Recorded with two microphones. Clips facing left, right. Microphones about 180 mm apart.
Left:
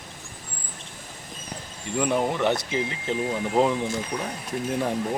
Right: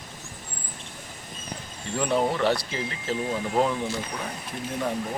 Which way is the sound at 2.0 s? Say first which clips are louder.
Even; 15° left (ahead or behind).